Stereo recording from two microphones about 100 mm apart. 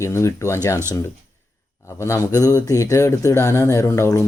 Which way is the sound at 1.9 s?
30° left (ahead or behind).